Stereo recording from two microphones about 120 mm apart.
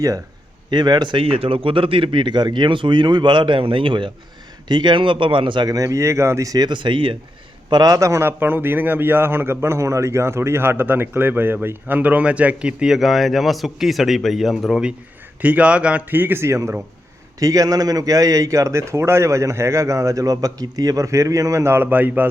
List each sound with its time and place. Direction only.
0.7 s a man's voice: 35° right (ahead or behind)
7.7 s a man's voice: 30° right (ahead or behind); by 22.3 s 15° right (ahead or behind)